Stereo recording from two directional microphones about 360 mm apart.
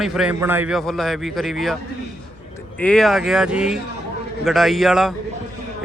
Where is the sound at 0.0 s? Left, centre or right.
Centre.